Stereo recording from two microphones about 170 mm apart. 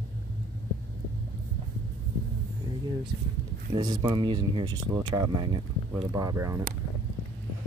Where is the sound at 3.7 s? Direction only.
25° right (ahead or behind).